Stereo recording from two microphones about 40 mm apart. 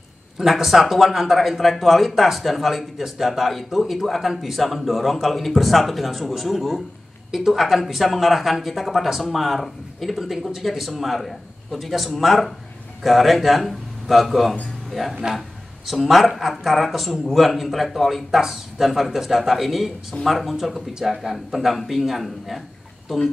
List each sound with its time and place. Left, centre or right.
0.4 s speech: centre